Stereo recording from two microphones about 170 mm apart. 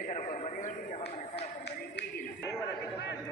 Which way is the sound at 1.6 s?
75° left (ahead or behind).